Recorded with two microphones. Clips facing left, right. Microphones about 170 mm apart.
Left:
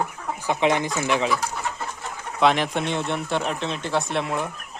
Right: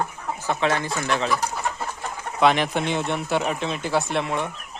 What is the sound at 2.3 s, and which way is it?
Speech, centre (ahead or behind).